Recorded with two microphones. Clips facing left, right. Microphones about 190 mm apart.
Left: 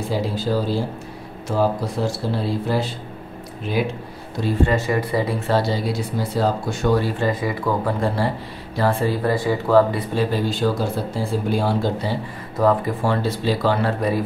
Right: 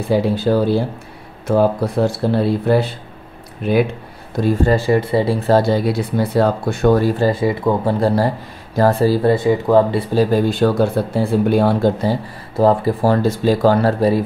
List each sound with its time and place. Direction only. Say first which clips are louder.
0.1 s speech: right 8 dB; 60° right (ahead or behind)
4.4 s speech: right 4 dB; 35° right (ahead or behind)
5.6 s speech: right 6 dB; 55° right (ahead or behind)
7.2 s speech: right 6 dB; 30° right (ahead or behind)
8.7 s speech: right 6 dB; 40° right (ahead or behind); by 10.0 s 25° right (ahead or behind)
10.1 s speech: right 7 dB; 50° right (ahead or behind)
12.5 s speech: right 4 dB; 30° right (ahead or behind)